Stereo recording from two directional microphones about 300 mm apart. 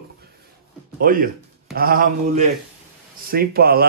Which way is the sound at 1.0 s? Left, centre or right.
Right.